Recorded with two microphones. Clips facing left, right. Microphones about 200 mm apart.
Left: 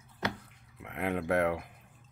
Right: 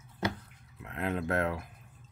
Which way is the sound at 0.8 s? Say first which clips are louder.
Even; 15° left (ahead or behind).